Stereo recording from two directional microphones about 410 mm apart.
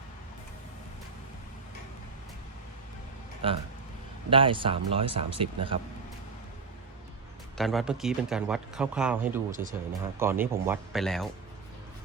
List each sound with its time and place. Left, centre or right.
3.4 s speech: centre
7.5 s speech: centre